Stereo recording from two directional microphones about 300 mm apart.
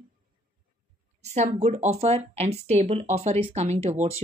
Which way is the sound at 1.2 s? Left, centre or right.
Right.